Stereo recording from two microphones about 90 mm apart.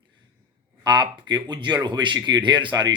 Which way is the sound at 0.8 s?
55° right (ahead or behind).